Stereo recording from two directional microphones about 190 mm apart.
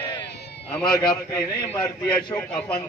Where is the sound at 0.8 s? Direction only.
20° left (ahead or behind).